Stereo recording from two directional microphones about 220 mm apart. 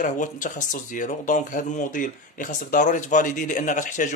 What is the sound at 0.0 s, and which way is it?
Speech, 35° left (ahead or behind).